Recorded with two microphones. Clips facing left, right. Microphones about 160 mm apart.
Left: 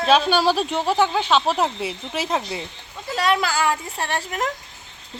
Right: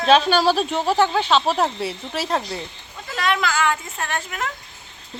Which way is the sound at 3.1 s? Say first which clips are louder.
Left 1 dB; 35° left (ahead or behind).